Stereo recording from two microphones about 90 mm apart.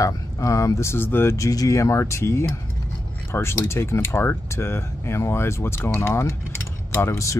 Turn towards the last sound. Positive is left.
turn(degrees=35)  # may be behind; listen again after turning